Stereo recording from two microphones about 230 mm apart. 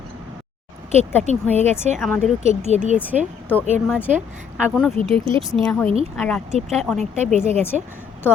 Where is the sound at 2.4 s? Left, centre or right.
Right.